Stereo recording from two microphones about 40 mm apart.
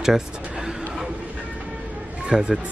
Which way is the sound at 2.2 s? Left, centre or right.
Right.